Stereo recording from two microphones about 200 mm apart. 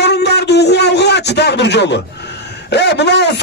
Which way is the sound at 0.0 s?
55° left (ahead or behind).